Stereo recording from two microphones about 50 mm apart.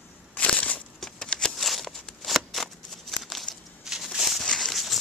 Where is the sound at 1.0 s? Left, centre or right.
Centre.